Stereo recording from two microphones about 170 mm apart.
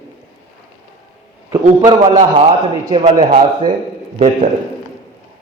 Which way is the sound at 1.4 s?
20° right (ahead or behind).